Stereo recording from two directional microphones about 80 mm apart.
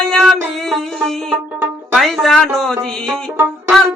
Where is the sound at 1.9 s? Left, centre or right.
Centre.